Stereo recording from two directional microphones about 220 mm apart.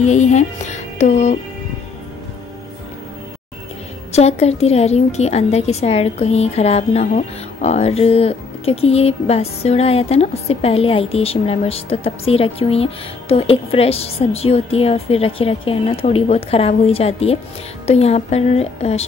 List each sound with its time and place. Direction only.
0.0 s speech: 30° left (ahead or behind)
4.1 s a woman's voice: 30° left (ahead or behind)